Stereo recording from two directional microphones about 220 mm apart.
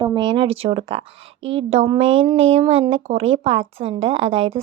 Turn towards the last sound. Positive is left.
turn(degrees=-25)  # may be behind; listen again after turning